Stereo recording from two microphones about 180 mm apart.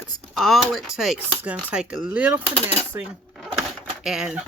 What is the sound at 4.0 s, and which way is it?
Speech, centre (ahead or behind).